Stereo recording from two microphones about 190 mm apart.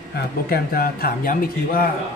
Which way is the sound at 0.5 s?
50° left (ahead or behind).